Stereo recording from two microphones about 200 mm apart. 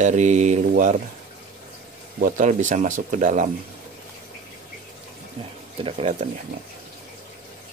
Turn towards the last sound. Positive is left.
turn(degrees=-30)  # may be behind; listen again after turning